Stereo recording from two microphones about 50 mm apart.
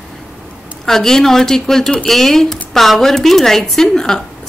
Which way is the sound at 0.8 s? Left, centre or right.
Centre.